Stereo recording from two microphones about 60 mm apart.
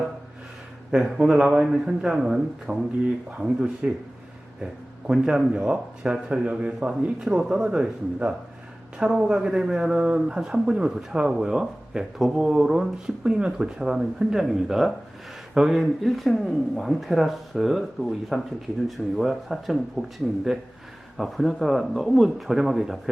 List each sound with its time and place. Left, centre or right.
0.9 s a man's voice: centre